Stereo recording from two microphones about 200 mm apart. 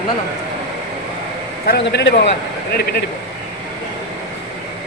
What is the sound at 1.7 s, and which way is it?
Speech, 55° left (ahead or behind).